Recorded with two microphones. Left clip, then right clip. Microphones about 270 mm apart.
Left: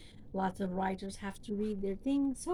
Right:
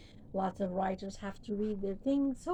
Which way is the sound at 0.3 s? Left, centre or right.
Left.